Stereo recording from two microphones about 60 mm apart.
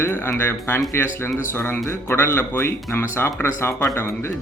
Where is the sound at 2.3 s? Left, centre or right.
Left.